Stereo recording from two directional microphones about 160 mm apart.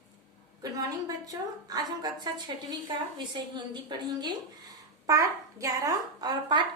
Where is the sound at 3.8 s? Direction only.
25° right (ahead or behind).